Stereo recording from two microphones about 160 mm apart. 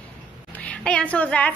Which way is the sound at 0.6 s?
5° left (ahead or behind).